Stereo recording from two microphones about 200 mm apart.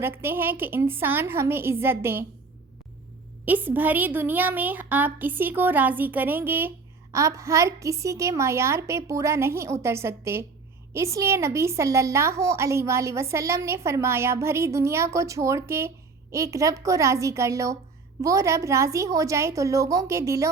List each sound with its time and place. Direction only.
0.0 s a woman's voice: 10° right (ahead or behind)
3.4 s a woman's voice: 10° right (ahead or behind)